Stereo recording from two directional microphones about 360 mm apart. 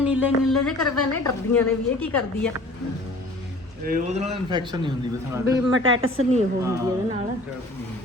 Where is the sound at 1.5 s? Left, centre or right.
Centre.